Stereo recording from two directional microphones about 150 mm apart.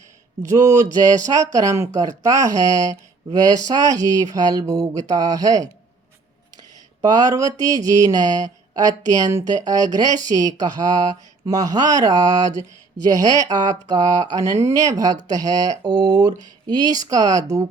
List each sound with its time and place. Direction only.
1.5 s speech: 20° right (ahead or behind)
7.0 s speech: 25° right (ahead or behind)